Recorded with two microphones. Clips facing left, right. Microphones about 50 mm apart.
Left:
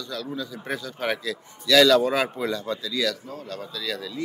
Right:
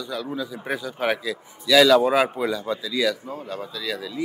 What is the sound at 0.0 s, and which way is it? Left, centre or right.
A man's voice, centre.